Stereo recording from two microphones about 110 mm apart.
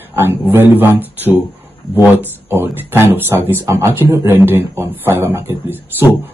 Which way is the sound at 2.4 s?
20° right (ahead or behind).